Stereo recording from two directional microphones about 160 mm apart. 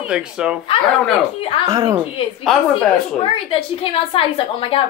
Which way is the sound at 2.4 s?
5° left (ahead or behind).